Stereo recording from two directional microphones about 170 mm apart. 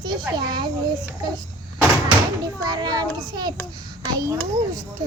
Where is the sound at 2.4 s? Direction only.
25° right (ahead or behind).